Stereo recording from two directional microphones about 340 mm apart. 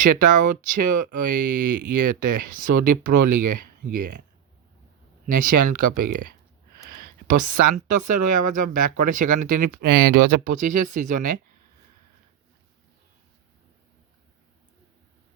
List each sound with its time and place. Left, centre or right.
0.0 s speech: right
5.5 s speech: right
6.8 s a sound: right
8.1 s speech: right